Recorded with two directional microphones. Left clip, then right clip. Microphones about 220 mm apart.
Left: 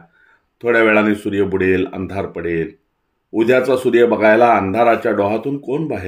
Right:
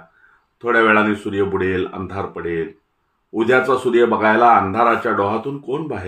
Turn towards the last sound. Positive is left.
turn(degrees=45)  # may be behind; listen again after turning